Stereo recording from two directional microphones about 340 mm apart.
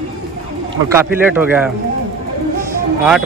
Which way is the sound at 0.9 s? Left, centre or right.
Centre.